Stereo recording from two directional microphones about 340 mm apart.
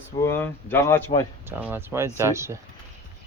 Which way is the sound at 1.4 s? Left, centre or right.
Centre.